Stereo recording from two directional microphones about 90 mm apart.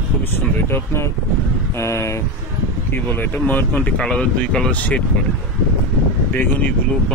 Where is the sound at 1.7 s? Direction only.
30° left (ahead or behind).